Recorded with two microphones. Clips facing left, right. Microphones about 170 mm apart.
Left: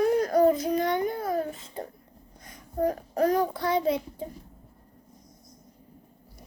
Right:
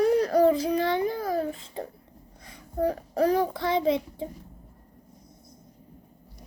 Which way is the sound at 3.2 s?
30° right (ahead or behind).